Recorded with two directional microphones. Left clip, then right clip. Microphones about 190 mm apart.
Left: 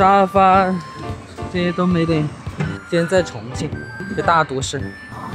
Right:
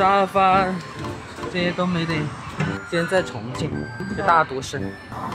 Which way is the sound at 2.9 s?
Centre (ahead or behind).